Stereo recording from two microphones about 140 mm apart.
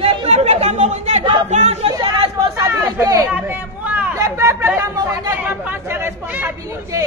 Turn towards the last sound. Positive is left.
turn(degrees=-20)  # may be behind; listen again after turning